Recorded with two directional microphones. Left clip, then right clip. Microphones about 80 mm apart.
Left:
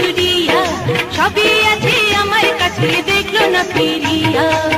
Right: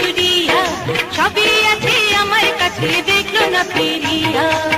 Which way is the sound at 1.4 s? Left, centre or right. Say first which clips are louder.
Left 1 dB; right.